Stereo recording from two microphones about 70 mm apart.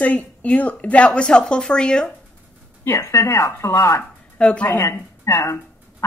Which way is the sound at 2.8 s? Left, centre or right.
Left.